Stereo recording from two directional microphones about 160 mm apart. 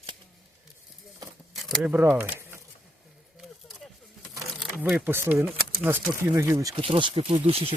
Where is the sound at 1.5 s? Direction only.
Centre (ahead or behind).